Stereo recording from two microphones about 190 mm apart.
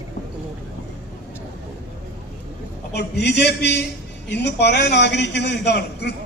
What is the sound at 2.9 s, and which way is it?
A man's voice, 60° left (ahead or behind).